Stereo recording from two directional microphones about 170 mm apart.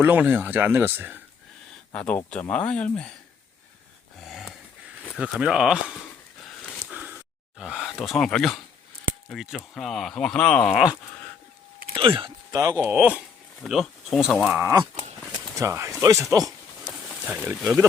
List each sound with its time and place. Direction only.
0.0 s speech: 10° right (ahead or behind)
1.9 s speech: 10° left (ahead or behind)
4.2 s a sound: centre (ahead or behind)
5.1 s speech: 5° right (ahead or behind)
6.6 s a sound: 5° left (ahead or behind)
6.9 s a sound: 10° right (ahead or behind)
7.6 s speech: 5° right (ahead or behind)
11.9 s speech: 30° right (ahead or behind)
12.9 s speech: 10° right (ahead or behind)
14.6 s speech: 15° right (ahead or behind)
17.2 s speech: 5° right (ahead or behind)